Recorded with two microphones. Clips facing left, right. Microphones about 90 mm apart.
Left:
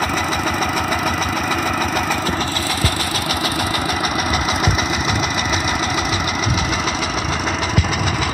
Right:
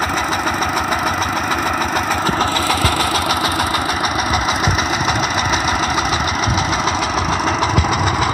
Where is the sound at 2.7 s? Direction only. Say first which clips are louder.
Right 5 dB; 80° right.